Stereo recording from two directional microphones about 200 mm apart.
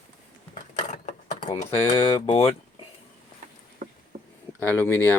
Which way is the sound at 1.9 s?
20° left (ahead or behind).